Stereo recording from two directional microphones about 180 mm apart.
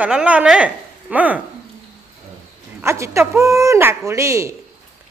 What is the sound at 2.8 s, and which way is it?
Speech, 15° right (ahead or behind).